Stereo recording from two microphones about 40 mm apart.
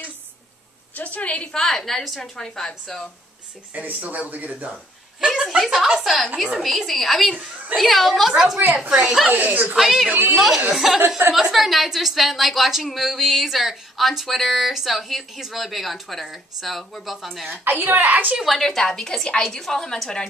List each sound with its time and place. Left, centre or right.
0.9 s a woman's voice: left
1.5 s a woman's voice: centre
3.7 s speech: right
5.2 s a woman's voice: centre
6.9 s a woman's voice: centre
8.1 s a woman's voice: centre
9.3 s a woman's voice: right
9.8 s a woman's voice: centre
11.2 s a woman's voice: right
11.5 s a woman's voice: centre
17.6 s a woman's voice: right
18.4 s a woman's voice: centre